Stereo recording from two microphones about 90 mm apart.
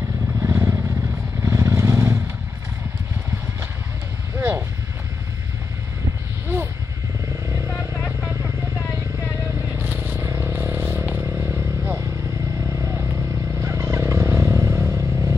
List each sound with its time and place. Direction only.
0.4 s vehicle: 25° right (ahead or behind)
4.4 s vehicle: 20° right (ahead or behind)
9.8 s vehicle: 20° right (ahead or behind)
10.2 s vehicle: 30° right (ahead or behind)
10.5 s a sound: 20° right (ahead or behind)
11.1 s vehicle: 20° right (ahead or behind)
13.1 s motorcycle: 30° right (ahead or behind)